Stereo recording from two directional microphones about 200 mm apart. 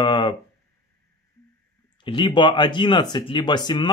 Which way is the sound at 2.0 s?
25° left (ahead or behind).